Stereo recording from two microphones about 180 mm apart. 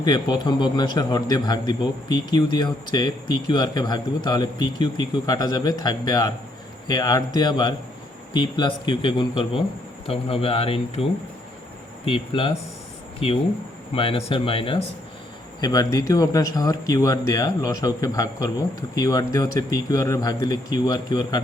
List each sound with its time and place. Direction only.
0.0 s a man's voice: 25° left (ahead or behind)
12.0 s a man's voice: 30° left (ahead or behind)